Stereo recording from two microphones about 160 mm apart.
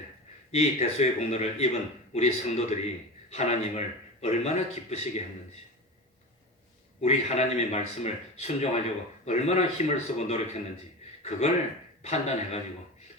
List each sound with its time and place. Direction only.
0.5 s a man's voice: 45° left (ahead or behind)
7.0 s a man's voice: 40° left (ahead or behind)